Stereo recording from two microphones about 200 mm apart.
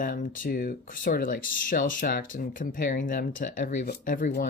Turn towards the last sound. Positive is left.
turn(degrees=45)  # may be behind; listen again after turning